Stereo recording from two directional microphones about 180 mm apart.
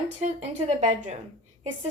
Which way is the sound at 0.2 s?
40° right (ahead or behind).